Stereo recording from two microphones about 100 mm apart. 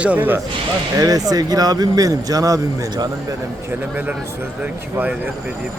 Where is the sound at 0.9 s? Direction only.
40° right (ahead or behind).